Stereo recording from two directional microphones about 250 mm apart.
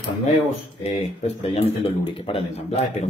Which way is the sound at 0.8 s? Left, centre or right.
Left.